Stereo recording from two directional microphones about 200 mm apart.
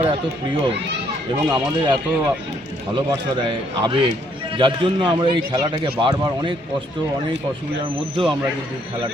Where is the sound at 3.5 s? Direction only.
25° right (ahead or behind).